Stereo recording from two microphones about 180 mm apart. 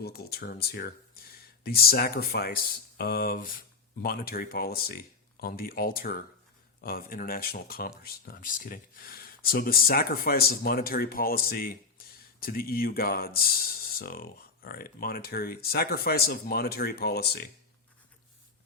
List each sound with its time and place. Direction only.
0.0 s speech: 60° left (ahead or behind)